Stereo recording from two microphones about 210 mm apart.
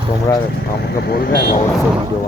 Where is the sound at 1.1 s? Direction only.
45° left (ahead or behind).